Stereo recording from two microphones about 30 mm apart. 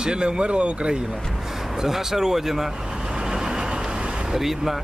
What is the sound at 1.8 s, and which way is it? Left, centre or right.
Speech, centre.